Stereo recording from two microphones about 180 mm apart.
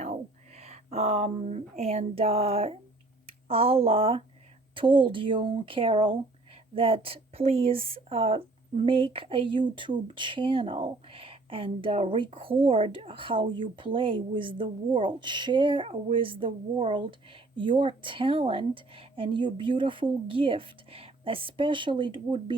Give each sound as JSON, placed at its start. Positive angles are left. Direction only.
{"t": 0.0, "sound": "speech", "side_deg": -40}